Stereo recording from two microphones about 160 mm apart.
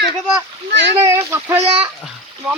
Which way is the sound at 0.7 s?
90° right.